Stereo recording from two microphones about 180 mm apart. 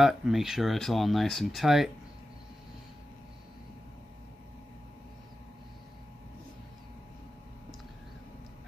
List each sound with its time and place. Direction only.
0.0 s speech: centre (ahead or behind)